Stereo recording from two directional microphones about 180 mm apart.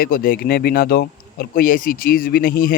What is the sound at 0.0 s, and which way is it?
Speech, 55° left (ahead or behind).